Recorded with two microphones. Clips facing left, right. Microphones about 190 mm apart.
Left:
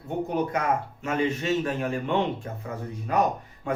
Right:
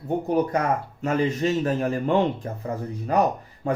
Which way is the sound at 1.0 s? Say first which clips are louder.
Right 4 dB; 35° right (ahead or behind).